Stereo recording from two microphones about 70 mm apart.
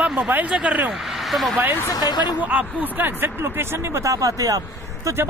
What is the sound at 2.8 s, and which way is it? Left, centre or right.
Speech, right.